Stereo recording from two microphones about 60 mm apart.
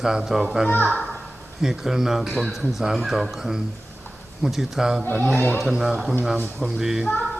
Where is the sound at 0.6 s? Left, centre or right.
Left.